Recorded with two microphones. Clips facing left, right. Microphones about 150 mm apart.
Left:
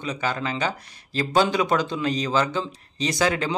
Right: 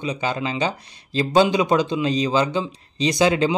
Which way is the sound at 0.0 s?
20° right (ahead or behind).